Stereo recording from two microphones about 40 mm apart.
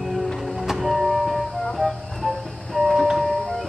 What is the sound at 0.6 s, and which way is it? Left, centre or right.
Vehicle, centre.